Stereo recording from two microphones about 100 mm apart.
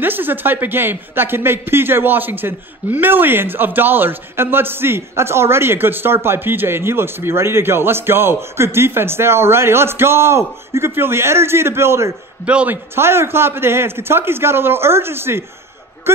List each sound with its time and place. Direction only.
0.0 s speech: 20° right (ahead or behind)
12.4 s a man's voice: 10° right (ahead or behind)
12.9 s speech: 25° right (ahead or behind)